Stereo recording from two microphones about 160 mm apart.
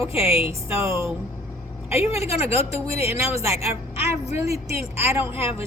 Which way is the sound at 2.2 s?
40° left (ahead or behind).